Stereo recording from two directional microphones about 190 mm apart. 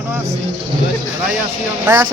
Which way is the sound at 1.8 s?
10° right (ahead or behind).